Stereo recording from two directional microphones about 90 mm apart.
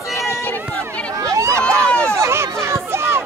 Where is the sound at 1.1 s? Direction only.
35° right (ahead or behind).